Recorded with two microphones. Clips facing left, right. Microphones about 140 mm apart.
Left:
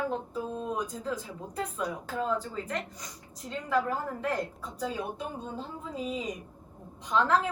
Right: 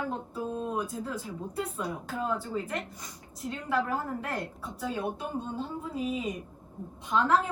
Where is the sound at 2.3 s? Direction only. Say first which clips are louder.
Right 3 dB; 5° right (ahead or behind).